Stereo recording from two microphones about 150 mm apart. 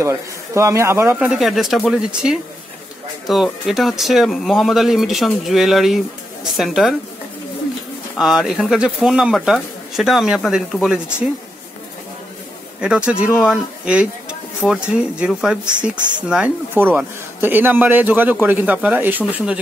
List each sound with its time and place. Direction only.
0.0 s a man's voice: 20° right (ahead or behind)
1.3 s speech: centre (ahead or behind)
8.2 s speech: 5° right (ahead or behind)
12.8 s speech: 5° right (ahead or behind)